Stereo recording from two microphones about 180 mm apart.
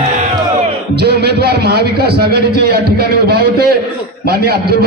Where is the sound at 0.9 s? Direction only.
65° right (ahead or behind).